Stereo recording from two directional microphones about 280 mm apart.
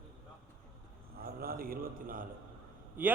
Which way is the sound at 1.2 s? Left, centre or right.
Right.